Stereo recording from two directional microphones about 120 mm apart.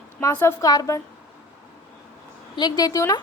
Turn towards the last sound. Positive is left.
turn(degrees=30)  # may be behind; listen again after turning